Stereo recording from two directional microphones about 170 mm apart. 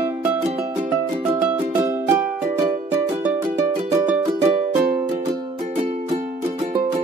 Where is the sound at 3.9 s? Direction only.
10° right (ahead or behind).